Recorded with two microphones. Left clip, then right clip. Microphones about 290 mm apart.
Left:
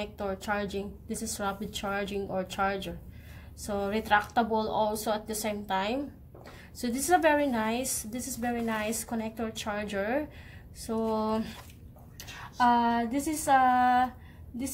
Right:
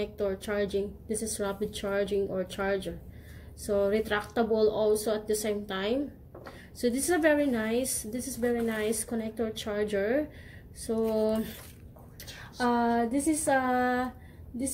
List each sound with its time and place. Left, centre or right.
0.0 s a woman's voice: left
12.7 s a woman's voice: left